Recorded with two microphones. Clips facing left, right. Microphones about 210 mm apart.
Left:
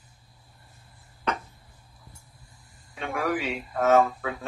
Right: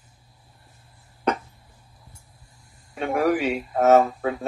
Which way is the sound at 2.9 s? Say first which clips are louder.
Right 7 dB; 45° right (ahead or behind).